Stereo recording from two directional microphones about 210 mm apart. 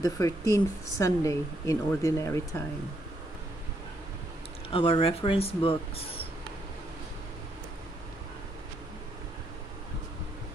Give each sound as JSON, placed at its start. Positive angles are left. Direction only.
{"t": 0.0, "sound": "speech", "side_deg": 15}
{"t": 4.6, "sound": "speech", "side_deg": 25}